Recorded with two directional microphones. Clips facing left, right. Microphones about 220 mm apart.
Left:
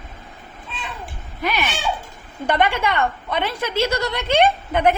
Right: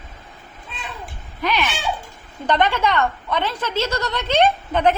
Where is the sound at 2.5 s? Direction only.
10° left (ahead or behind).